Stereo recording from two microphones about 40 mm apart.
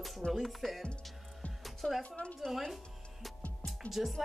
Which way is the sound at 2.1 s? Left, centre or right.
Left.